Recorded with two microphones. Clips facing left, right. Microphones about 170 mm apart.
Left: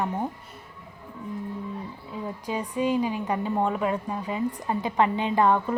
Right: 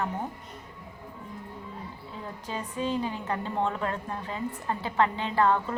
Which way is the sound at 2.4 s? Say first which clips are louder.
Left 5 dB; 10° left (ahead or behind).